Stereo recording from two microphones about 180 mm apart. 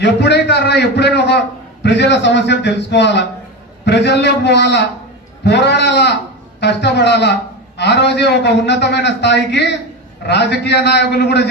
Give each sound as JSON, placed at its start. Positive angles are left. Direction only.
{"t": 0.0, "sound": "a man's voice", "side_deg": 70}